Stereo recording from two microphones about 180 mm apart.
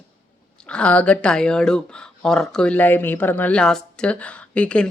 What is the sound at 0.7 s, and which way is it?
Speech, 5° left (ahead or behind).